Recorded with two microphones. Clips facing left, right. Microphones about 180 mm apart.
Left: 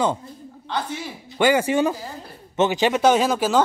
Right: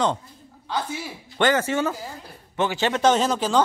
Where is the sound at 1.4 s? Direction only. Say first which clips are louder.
Left 3 dB; 15° left (ahead or behind).